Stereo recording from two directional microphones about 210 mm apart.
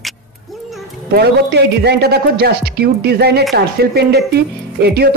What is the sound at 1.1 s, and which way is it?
A woman's voice, 50° right (ahead or behind).